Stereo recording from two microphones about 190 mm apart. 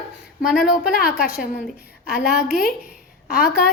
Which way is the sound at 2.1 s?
50° left (ahead or behind).